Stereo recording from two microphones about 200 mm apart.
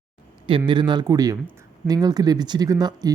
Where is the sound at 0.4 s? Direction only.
25° right (ahead or behind).